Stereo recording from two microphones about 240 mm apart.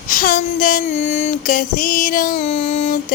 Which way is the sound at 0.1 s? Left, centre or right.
Left.